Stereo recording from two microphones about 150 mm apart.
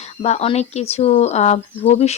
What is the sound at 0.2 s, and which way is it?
Speech, 45° left (ahead or behind).